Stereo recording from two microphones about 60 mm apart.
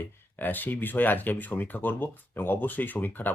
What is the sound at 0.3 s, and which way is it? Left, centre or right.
Speech, left.